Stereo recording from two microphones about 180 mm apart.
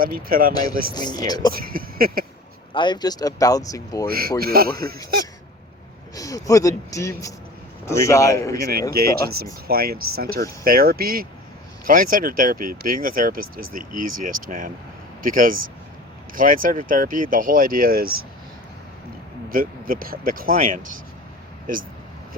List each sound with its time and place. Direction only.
0.0 s speech: 55° right (ahead or behind)
0.5 s speech: 20° left (ahead or behind)
1.5 s speech: 55° right (ahead or behind)
2.7 s speech: 25° left (ahead or behind)
4.1 s a man's voice: 55° right (ahead or behind)
6.1 s speech: 20° left (ahead or behind)
9.6 s a man's voice: 55° right (ahead or behind)
19.5 s speech: 50° right (ahead or behind)